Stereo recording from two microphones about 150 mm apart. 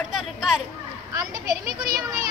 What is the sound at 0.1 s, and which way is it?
Speech, centre (ahead or behind).